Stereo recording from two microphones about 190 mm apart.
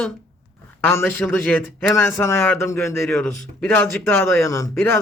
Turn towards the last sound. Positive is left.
turn(degrees=15)  # may be behind; listen again after turning